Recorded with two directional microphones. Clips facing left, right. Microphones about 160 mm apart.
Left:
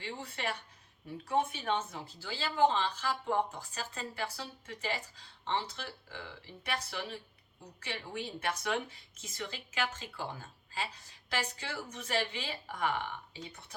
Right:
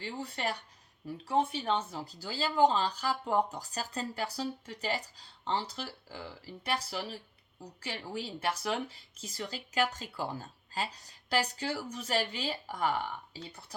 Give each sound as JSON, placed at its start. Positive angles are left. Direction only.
{"t": 0.0, "sound": "speech", "side_deg": -35}
{"t": 7.6, "sound": "speech", "side_deg": -35}